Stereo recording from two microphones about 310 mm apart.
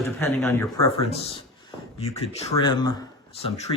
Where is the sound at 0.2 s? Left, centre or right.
Centre.